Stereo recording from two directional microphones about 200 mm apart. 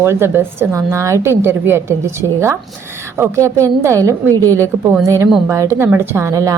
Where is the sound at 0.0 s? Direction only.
10° right (ahead or behind).